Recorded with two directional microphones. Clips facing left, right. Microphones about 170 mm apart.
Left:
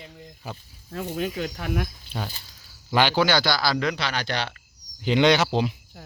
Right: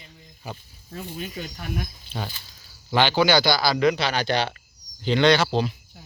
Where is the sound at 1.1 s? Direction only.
90° left.